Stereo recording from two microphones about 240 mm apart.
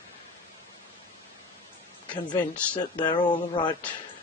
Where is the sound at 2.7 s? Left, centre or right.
Centre.